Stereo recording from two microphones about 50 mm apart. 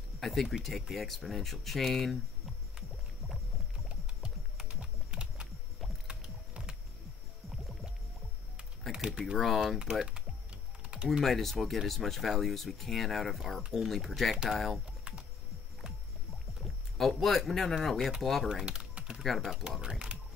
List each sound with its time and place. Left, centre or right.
0.2 s speech: centre
4.7 s typing: centre
6.0 s music: right
8.9 s a sound: centre
9.4 s speech: centre
10.0 s typing: right
11.1 s speech: centre
16.6 s speech: centre
18.5 s typing: centre
19.2 s speech: centre
19.8 s speech: centre